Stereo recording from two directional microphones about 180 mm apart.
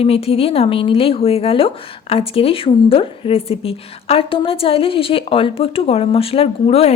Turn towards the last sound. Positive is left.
turn(degrees=35)  # may be behind; listen again after turning